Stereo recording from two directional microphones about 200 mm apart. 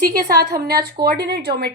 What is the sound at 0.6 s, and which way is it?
Speech, 50° right (ahead or behind).